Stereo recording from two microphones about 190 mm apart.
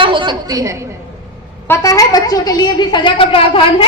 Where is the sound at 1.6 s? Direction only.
20° left (ahead or behind).